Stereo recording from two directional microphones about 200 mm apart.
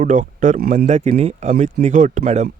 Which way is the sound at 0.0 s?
40° right (ahead or behind).